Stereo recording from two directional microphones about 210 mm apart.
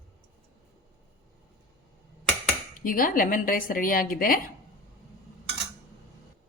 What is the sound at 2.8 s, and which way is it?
Speech, 40° left (ahead or behind).